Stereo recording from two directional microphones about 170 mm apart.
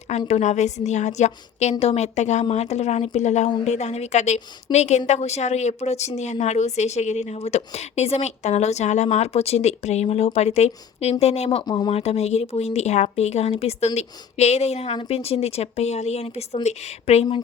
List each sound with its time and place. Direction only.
0.1 s a woman's voice: 40° left (ahead or behind)